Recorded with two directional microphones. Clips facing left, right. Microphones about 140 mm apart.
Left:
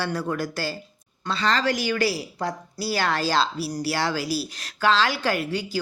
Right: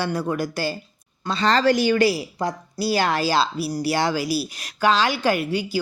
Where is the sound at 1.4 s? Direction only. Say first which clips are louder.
Right 6 dB; 35° right (ahead or behind); by 5.8 s 10° right (ahead or behind).